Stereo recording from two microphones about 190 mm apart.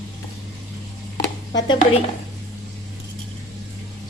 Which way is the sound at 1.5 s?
25° left (ahead or behind).